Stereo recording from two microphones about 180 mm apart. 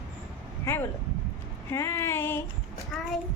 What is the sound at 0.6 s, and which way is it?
Speech, 10° left (ahead or behind).